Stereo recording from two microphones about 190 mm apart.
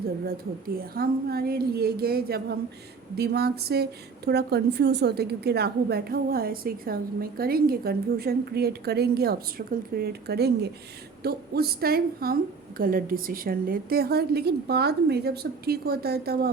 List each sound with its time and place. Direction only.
0.8 s a woman's voice: 50° right (ahead or behind)